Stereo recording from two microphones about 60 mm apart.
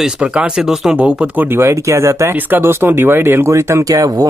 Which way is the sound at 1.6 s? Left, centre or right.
Right.